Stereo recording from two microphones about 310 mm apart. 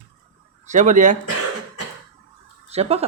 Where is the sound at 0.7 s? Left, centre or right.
Right.